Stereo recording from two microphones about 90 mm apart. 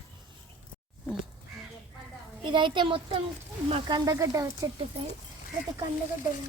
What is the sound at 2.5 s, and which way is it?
Speech, 65° right (ahead or behind).